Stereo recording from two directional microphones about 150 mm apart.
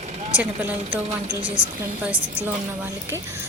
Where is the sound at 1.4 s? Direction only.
35° right (ahead or behind).